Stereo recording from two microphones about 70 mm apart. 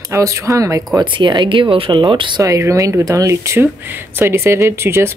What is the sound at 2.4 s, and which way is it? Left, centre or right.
Speech, right.